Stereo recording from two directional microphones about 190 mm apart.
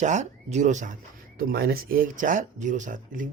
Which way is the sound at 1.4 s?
55° right (ahead or behind).